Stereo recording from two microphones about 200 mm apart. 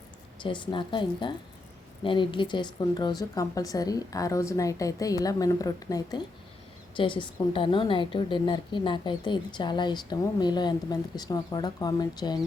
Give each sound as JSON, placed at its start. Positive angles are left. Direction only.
{"t": 0.4, "sound": "a woman's voice", "side_deg": 25}